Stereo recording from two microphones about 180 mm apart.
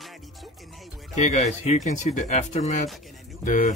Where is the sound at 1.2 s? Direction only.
40° left (ahead or behind).